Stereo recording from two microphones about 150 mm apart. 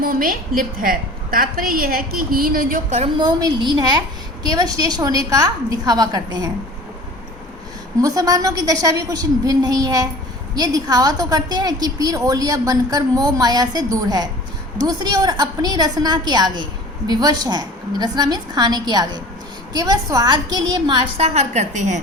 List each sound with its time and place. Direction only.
0.0 s a woman's voice: 70° right (ahead or behind)
3.2 s a woman's voice: 30° right (ahead or behind)
8.0 s a woman's voice: 25° right (ahead or behind)
21.2 s a woman's voice: 45° right (ahead or behind)